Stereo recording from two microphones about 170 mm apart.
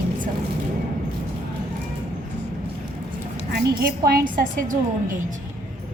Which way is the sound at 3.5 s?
60° right (ahead or behind).